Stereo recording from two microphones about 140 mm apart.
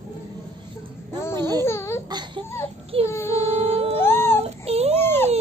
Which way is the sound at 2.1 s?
30° right (ahead or behind).